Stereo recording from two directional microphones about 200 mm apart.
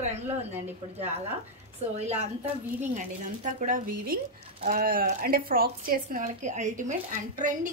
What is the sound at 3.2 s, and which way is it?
Speech, 40° right (ahead or behind).